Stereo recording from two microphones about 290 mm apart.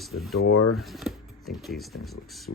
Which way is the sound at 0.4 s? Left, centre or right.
Left.